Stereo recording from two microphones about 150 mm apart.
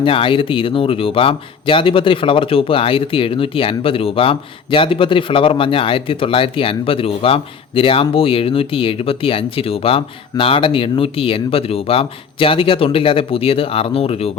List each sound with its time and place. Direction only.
0.0 s speech: 35° left (ahead or behind)